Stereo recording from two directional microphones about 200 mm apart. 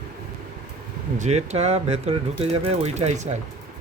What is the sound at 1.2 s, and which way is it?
Speech, 35° right (ahead or behind).